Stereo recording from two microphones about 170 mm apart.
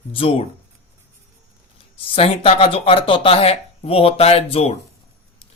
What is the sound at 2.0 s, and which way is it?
Speech, 35° left (ahead or behind).